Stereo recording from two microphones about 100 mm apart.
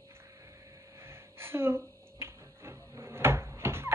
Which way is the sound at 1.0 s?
25° right (ahead or behind).